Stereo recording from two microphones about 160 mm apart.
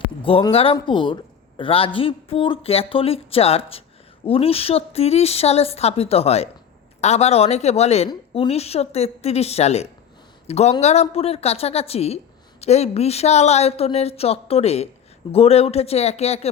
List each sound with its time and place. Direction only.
0.2 s a woman's voice: 35° left (ahead or behind)